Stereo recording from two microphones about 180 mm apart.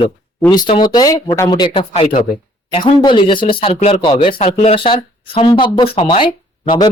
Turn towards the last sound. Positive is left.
turn(degrees=25)  # may be behind; listen again after turning